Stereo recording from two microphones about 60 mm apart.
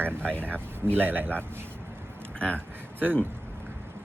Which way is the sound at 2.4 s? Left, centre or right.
Centre.